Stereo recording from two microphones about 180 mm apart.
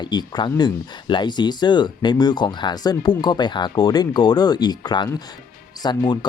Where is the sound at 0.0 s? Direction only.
25° left (ahead or behind).